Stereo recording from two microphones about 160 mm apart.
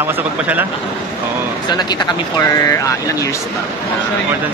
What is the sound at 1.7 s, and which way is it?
Speech, 25° left (ahead or behind).